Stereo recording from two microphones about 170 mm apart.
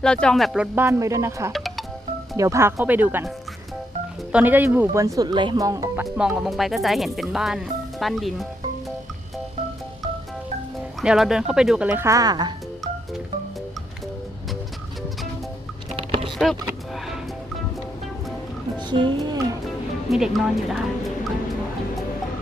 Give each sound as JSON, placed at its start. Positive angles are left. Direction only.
{"t": 0.0, "sound": "speech", "side_deg": 5}
{"t": 1.5, "sound": "music", "side_deg": 0}
{"t": 2.3, "sound": "speech", "side_deg": -20}
{"t": 4.3, "sound": "speech", "side_deg": -10}
{"t": 6.1, "sound": "speech", "side_deg": -5}
{"t": 11.0, "sound": "speech", "side_deg": -5}
{"t": 15.9, "sound": "music", "side_deg": -35}
{"t": 18.8, "sound": "speech", "side_deg": -25}
{"t": 20.1, "sound": "speech", "side_deg": 0}